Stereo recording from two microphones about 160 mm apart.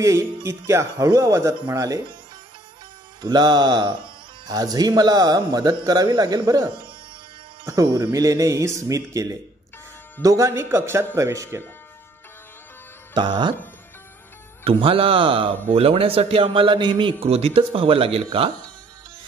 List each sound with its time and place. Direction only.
0.0 s speech: 20° right (ahead or behind)
3.2 s a man's voice: 25° right (ahead or behind)
13.1 s speech: 30° right (ahead or behind)
14.6 s a man's voice: 35° right (ahead or behind)